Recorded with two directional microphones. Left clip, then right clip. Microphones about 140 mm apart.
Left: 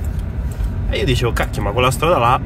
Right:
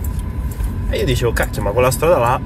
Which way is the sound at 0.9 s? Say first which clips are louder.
Right 1 dB; 5° left (ahead or behind).